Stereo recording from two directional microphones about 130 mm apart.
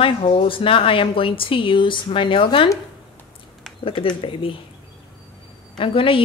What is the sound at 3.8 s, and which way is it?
Speech, 45° left (ahead or behind).